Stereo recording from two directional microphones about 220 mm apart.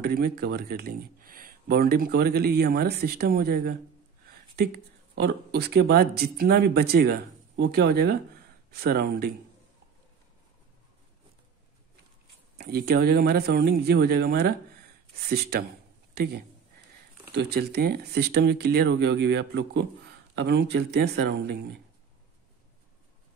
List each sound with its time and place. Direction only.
0.0 s speech: 45° right (ahead or behind)
12.5 s speech: 45° right (ahead or behind)
17.3 s speech: 50° right (ahead or behind)